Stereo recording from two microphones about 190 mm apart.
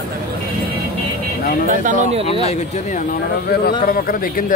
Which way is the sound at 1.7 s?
40° right (ahead or behind).